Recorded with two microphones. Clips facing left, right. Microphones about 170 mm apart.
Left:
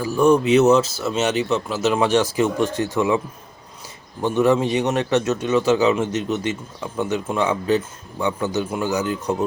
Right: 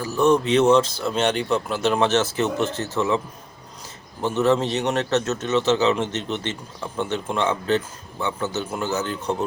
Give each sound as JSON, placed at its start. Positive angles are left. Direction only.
{"t": 0.0, "sound": "a man's voice", "side_deg": 10}
{"t": 4.2, "sound": "a man's voice", "side_deg": 10}